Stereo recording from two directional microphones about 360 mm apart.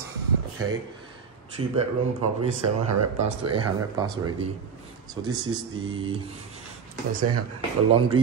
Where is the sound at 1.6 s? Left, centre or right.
Right.